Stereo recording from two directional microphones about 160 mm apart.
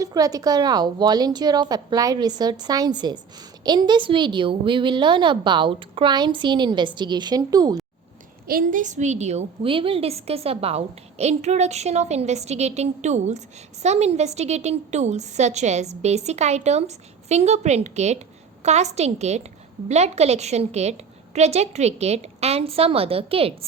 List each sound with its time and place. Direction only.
0.0 s a woman's voice: 20° right (ahead or behind)
8.4 s a woman's voice: 60° right (ahead or behind); by 23.6 s 35° right (ahead or behind)